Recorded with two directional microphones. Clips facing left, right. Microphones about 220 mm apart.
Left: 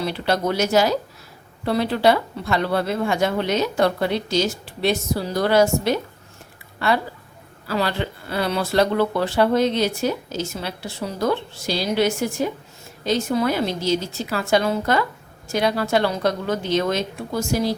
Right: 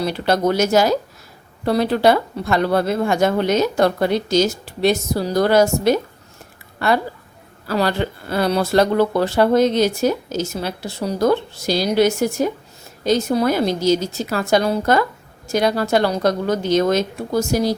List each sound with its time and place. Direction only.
0.0 s speech: 45° right (ahead or behind)